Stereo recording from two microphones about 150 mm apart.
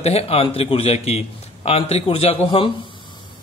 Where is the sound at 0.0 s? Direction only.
45° left (ahead or behind).